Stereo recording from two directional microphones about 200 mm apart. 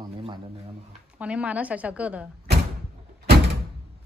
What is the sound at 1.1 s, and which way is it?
Speech, 5° right (ahead or behind).